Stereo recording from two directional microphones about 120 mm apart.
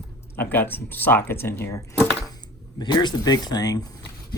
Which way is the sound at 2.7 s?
35° left (ahead or behind).